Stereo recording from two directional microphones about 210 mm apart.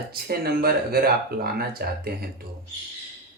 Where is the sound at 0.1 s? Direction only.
45° right (ahead or behind).